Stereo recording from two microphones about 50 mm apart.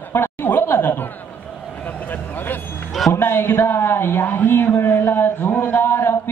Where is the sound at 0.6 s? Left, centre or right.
Left.